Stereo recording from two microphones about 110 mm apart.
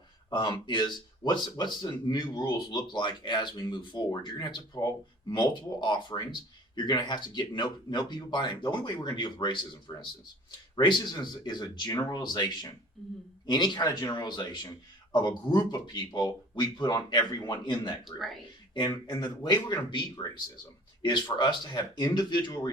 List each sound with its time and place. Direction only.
0.3 s speech: 45° left (ahead or behind)
13.5 s speech: 40° left (ahead or behind)